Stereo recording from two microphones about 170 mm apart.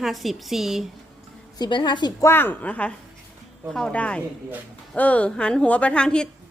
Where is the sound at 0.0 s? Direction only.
Centre (ahead or behind).